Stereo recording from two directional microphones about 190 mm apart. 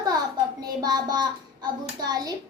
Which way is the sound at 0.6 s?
20° right (ahead or behind).